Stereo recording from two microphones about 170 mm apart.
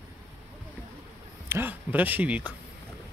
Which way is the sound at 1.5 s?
10° right (ahead or behind).